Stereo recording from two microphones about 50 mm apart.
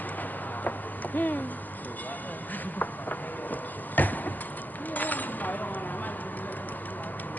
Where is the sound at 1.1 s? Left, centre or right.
Left.